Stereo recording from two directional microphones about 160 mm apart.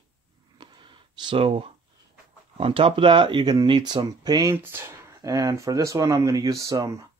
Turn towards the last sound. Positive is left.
turn(degrees=-20)  # may be behind; listen again after turning